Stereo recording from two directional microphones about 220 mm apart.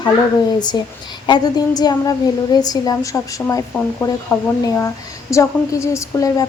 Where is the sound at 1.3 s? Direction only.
20° left (ahead or behind).